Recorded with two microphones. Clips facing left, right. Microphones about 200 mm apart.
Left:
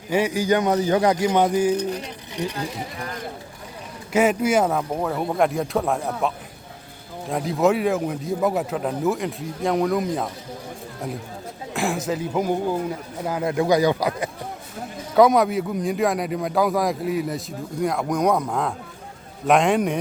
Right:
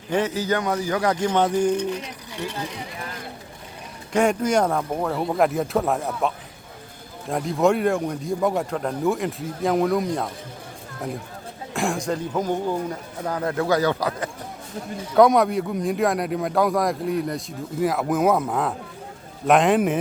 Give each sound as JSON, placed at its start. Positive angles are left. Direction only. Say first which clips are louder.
{"t": 0.1, "sound": "a man's voice", "louder": "left 2 dB", "side_deg": 10}
{"t": 1.1, "sound": "speech", "louder": "left 2 dB", "side_deg": 10}
{"t": 1.7, "sound": "speech", "louder": "even", "side_deg": 40}
{"t": 2.4, "sound": "speech", "louder": "left 3 dB", "side_deg": 15}
{"t": 4.1, "sound": "a man's voice", "louder": "left 1 dB", "side_deg": 5}
{"t": 11.7, "sound": "a man's voice", "louder": "even", "side_deg": 0}
{"t": 15.1, "sound": "a man's voice", "louder": "even", "side_deg": 0}